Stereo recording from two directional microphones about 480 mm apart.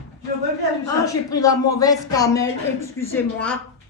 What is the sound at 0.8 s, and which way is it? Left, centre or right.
Speech, centre.